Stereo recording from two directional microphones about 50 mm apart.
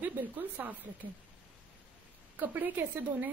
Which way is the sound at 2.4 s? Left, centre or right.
Right.